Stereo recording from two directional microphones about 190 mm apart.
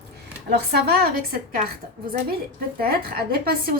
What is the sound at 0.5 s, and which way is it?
A woman's voice, 55° right (ahead or behind).